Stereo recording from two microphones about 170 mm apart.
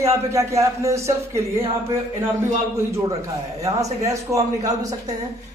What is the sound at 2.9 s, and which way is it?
A man's voice, 15° right (ahead or behind).